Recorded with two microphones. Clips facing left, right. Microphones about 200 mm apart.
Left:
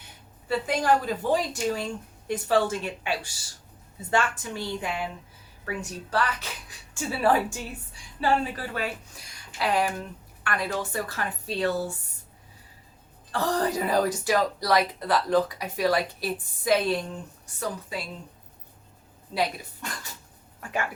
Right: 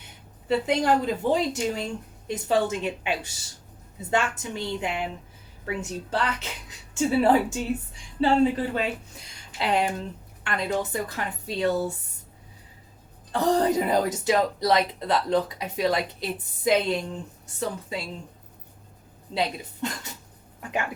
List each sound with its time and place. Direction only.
0.4 s a woman's voice: 20° right (ahead or behind)
13.3 s a woman's voice: 20° right (ahead or behind)
19.3 s speech: 25° right (ahead or behind)